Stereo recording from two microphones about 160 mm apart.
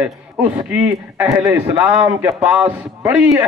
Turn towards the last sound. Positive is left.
turn(degrees=-15)  # may be behind; listen again after turning